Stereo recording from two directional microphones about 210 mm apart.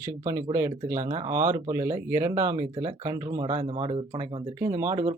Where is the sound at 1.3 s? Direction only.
15° right (ahead or behind).